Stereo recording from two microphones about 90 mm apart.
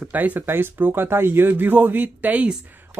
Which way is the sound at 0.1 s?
20° right (ahead or behind).